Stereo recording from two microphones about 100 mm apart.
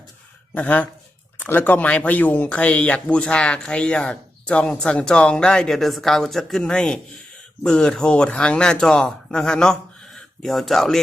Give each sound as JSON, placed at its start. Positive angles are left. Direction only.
{"t": 0.5, "sound": "speech", "side_deg": 15}